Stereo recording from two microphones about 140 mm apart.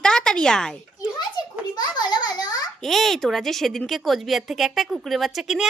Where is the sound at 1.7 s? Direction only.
30° left (ahead or behind).